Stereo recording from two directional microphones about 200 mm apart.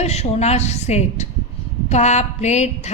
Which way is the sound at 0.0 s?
35° left (ahead or behind).